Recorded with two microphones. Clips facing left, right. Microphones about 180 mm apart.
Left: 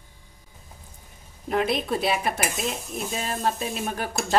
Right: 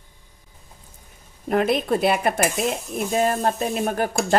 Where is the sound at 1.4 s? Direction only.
50° right (ahead or behind).